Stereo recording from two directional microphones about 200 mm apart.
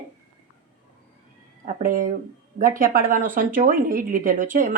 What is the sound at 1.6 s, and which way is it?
Speech, 40° right (ahead or behind).